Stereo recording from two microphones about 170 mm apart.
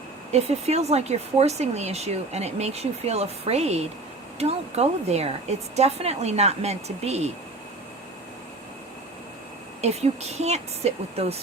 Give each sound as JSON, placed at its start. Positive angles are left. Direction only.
{"t": 0.3, "sound": "speech", "side_deg": -40}
{"t": 9.8, "sound": "speech", "side_deg": -40}